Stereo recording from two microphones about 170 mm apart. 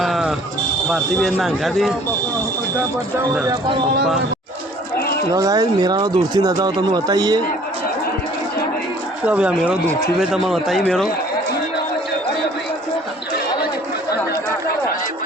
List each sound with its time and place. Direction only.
0.0 s fire alarm: centre (ahead or behind)
0.9 s speech: centre (ahead or behind)
4.9 s a sound: 65° left (ahead or behind)
5.3 s speech: 20° right (ahead or behind)
9.2 s speech: 5° right (ahead or behind)